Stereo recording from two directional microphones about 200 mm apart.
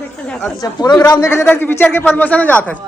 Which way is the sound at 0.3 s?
5° left (ahead or behind).